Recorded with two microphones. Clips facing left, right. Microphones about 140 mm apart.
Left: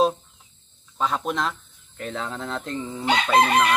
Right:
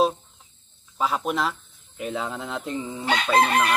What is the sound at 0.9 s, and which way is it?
Speech, 5° right (ahead or behind).